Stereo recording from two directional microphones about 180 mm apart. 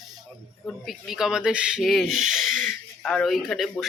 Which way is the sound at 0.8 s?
Centre (ahead or behind).